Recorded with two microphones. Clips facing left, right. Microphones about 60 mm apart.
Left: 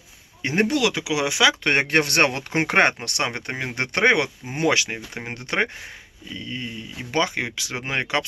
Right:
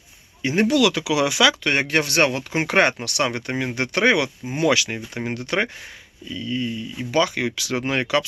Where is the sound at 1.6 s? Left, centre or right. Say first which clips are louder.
Left 1 dB; left.